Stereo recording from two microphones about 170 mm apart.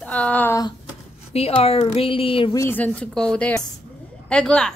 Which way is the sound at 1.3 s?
35° left (ahead or behind).